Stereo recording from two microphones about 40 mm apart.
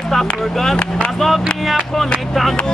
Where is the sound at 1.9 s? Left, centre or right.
Centre.